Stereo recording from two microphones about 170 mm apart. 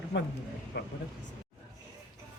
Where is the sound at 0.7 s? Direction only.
85° left.